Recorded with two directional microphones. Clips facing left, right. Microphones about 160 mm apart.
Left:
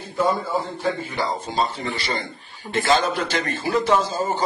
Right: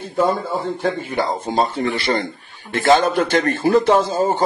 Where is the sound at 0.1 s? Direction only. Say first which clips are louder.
Right 3 dB; 55° right (ahead or behind).